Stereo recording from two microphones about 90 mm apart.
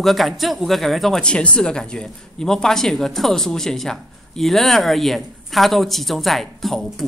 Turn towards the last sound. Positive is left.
turn(degrees=5)  # may be behind; listen again after turning